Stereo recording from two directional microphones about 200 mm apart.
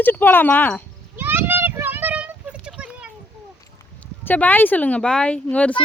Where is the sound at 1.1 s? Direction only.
10° right (ahead or behind).